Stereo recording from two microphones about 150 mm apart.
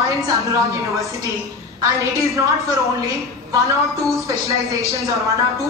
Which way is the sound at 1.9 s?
20° right (ahead or behind).